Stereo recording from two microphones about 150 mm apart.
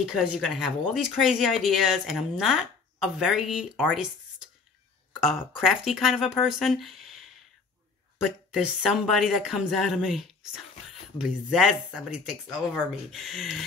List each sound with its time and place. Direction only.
0.0 s speech: centre (ahead or behind)
5.1 s speech: 5° right (ahead or behind)